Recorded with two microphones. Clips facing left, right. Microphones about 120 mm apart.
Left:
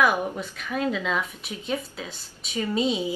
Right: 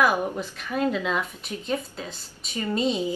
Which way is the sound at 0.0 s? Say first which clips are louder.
Even; centre (ahead or behind).